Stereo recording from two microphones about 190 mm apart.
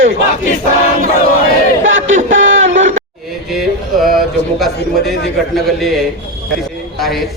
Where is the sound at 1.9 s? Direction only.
80° right.